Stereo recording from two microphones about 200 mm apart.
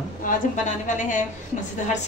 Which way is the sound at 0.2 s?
40° left (ahead or behind).